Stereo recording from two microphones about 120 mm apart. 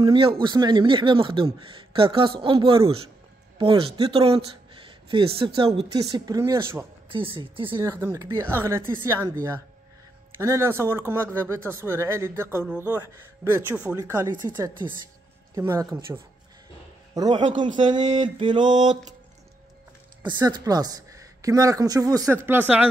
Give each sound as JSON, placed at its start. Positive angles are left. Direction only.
{"t": 0.0, "sound": "speech", "side_deg": -45}
{"t": 5.9, "sound": "speech", "side_deg": -30}
{"t": 7.1, "sound": "speech", "side_deg": -45}
{"t": 7.8, "sound": "speech", "side_deg": -25}
{"t": 15.5, "sound": "speech", "side_deg": -30}
{"t": 17.3, "sound": "a man's voice", "side_deg": -75}
{"t": 17.7, "sound": "a woman's voice", "side_deg": -40}
{"t": 20.2, "sound": "a woman's voice", "side_deg": -35}